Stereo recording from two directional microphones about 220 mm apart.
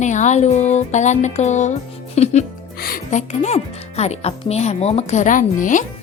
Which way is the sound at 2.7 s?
40° left (ahead or behind).